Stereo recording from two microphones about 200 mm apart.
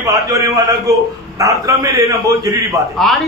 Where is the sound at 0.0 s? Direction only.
15° right (ahead or behind).